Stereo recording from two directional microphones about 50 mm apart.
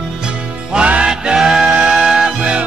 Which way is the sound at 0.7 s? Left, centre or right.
Right.